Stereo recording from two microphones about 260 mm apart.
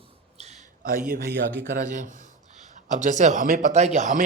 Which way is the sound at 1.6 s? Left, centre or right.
Right.